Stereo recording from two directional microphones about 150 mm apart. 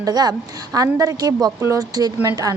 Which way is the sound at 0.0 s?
25° right (ahead or behind).